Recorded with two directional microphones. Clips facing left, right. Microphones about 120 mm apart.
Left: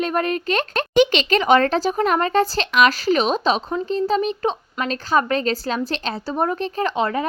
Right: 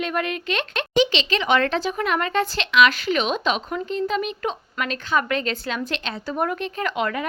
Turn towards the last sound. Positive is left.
turn(degrees=30)  # may be behind; listen again after turning